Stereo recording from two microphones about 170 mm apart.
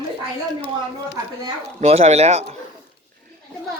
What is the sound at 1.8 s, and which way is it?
Speech, 40° right (ahead or behind).